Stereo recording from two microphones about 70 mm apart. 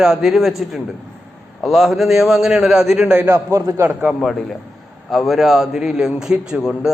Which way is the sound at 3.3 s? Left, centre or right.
Right.